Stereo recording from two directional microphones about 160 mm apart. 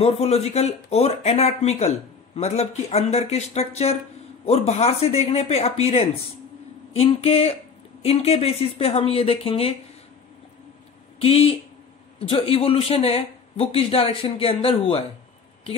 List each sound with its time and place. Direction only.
0.0 s speech: 40° left (ahead or behind)
11.1 s speech: 35° left (ahead or behind)